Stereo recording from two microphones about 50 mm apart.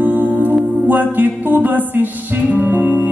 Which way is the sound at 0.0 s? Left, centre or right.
Right.